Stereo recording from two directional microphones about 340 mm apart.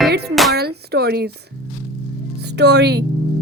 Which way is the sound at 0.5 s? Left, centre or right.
Right.